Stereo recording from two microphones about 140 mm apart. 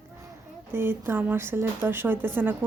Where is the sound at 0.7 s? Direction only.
15° right (ahead or behind).